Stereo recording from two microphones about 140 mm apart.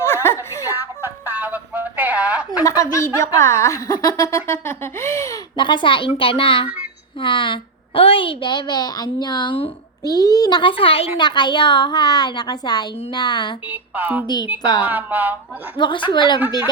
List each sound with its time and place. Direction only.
0.0 s a sound: 15° left (ahead or behind)
0.7 s a sound: 15° right (ahead or behind)
2.6 s a woman's voice: 25° left (ahead or behind)
5.5 s speech: 35° left (ahead or behind)
10.0 s speech: 30° left (ahead or behind)
13.7 s speech: 10° right (ahead or behind)
14.6 s speech: 30° left (ahead or behind)
14.8 s speech: 15° right (ahead or behind)
15.8 s speech: 35° left (ahead or behind)